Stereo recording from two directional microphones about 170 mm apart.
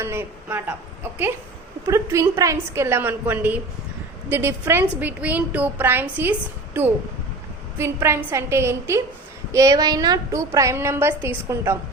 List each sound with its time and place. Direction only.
0.0 s a woman's voice: 15° right (ahead or behind)
1.9 s a woman's voice: 15° right (ahead or behind)
7.8 s a woman's voice: 15° right (ahead or behind)